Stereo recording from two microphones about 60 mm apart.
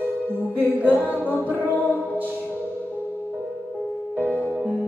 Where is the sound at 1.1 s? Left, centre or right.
Left.